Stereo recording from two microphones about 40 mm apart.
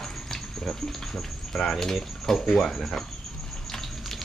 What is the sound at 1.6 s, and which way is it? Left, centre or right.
Speech, centre.